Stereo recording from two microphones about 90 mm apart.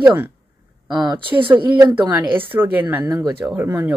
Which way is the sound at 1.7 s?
55° right (ahead or behind).